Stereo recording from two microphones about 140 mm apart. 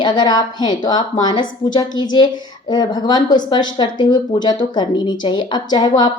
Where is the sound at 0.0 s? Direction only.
30° left (ahead or behind).